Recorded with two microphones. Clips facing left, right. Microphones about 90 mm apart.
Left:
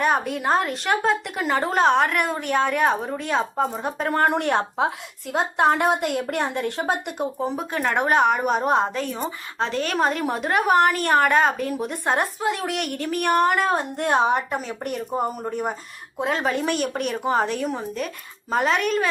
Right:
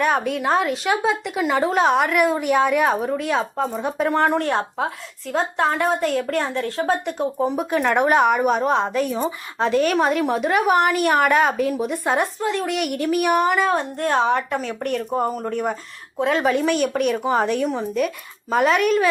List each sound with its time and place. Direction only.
0.0 s speech: centre (ahead or behind)
5.5 s a woman's voice: 20° left (ahead or behind)
7.3 s speech: 10° right (ahead or behind)
9.0 s speech: 10° right (ahead or behind)
14.0 s a woman's voice: 20° left (ahead or behind); by 19.0 s 5° right (ahead or behind)